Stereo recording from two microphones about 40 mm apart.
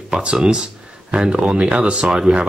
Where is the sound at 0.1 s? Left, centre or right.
Right.